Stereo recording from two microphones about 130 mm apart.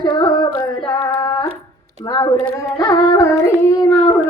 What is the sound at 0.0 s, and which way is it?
Singing, 35° left (ahead or behind).